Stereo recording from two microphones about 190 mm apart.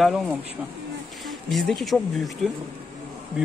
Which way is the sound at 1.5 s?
Centre (ahead or behind).